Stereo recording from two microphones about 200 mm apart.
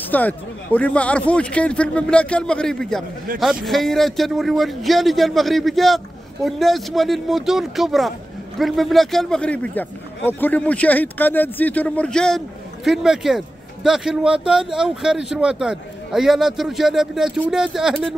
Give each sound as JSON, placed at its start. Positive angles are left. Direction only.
{"t": 0.0, "sound": "a man's voice", "side_deg": 10}
{"t": 3.3, "sound": "speech", "side_deg": -45}
{"t": 3.6, "sound": "a man's voice", "side_deg": 0}